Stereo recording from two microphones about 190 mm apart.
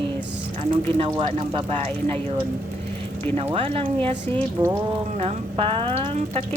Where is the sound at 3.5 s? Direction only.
30° right (ahead or behind).